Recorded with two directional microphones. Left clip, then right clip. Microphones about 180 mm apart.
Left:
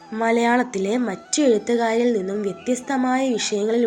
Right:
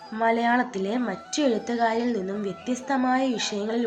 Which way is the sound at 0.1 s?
35° left (ahead or behind).